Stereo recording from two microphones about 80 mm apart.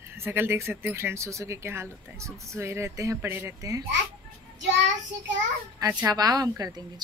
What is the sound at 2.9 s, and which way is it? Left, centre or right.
Speech, right.